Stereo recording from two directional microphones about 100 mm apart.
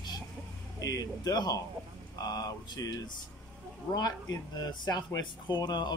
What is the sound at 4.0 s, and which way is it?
Speech, 40° left (ahead or behind).